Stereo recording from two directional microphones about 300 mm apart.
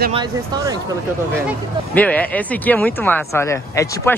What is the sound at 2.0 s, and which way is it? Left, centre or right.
Speech, centre.